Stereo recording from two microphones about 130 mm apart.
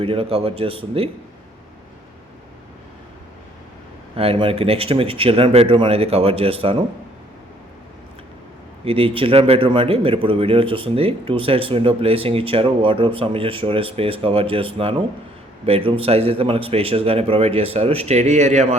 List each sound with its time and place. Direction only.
0.0 s a man's voice: 45° right (ahead or behind)
4.1 s a man's voice: 45° right (ahead or behind)
8.8 s a man's voice: 50° right (ahead or behind)